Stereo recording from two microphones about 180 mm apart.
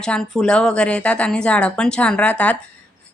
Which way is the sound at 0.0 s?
5° left (ahead or behind).